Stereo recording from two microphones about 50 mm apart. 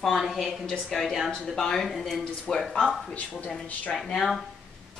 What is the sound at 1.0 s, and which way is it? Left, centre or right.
Speech, centre.